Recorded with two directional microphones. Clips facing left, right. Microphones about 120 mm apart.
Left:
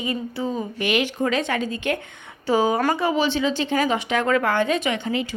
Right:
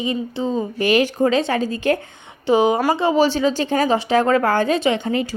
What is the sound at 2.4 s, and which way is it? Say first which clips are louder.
Speech: right 4 dB; 20° right (ahead or behind).